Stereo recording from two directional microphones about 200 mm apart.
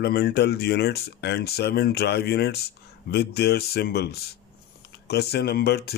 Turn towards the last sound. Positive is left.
turn(degrees=55)  # may be behind; listen again after turning